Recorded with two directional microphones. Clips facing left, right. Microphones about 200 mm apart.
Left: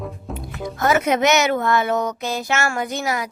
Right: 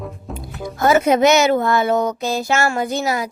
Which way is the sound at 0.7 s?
30° right (ahead or behind).